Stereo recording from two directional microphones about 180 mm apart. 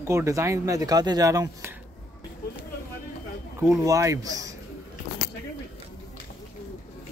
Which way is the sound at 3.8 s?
20° right (ahead or behind).